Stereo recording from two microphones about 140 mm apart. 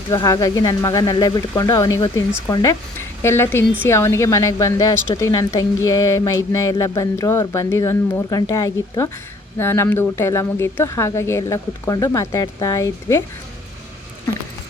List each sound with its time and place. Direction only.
0.1 s a woman's voice: 25° left (ahead or behind)